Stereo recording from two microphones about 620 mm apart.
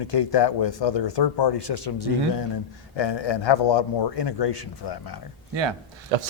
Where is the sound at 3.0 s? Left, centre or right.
Left.